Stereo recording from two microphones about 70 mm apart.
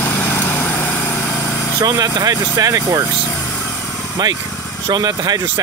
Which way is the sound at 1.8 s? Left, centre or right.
Right.